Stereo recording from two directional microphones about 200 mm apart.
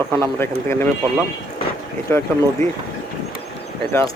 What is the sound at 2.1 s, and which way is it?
Speech, 15° left (ahead or behind).